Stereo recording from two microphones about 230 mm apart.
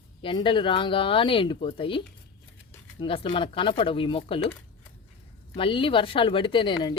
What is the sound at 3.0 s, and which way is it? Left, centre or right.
Speech, left.